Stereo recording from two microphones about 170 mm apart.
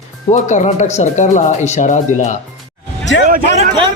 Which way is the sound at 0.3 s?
45° left (ahead or behind).